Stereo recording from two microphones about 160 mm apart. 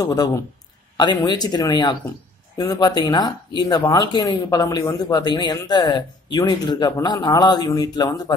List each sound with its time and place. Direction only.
0.0 s speech: 20° left (ahead or behind)